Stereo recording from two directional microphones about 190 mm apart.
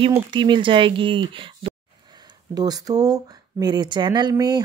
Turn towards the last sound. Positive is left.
turn(degrees=-20)  # may be behind; listen again after turning